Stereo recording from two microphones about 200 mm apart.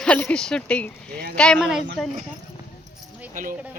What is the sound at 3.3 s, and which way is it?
Speech, 40° right (ahead or behind).